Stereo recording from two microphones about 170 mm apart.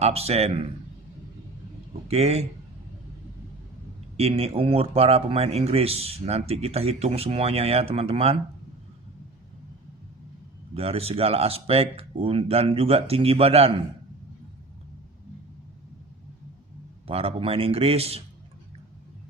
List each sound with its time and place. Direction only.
0.0 s speech: 35° right (ahead or behind)
2.0 s speech: 35° right (ahead or behind)
4.2 s speech: 35° right (ahead or behind)
10.8 s speech: 35° right (ahead or behind)
17.1 s speech: 35° right (ahead or behind)